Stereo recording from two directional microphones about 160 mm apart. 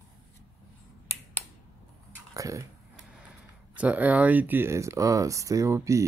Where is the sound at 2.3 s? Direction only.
20° right (ahead or behind).